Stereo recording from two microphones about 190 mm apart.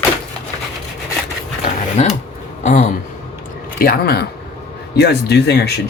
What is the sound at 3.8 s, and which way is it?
Speech, 55° left (ahead or behind).